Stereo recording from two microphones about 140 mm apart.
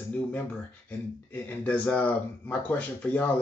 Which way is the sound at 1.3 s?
10° left (ahead or behind).